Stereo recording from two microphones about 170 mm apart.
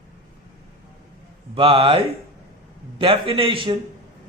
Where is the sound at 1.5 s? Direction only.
30° right (ahead or behind).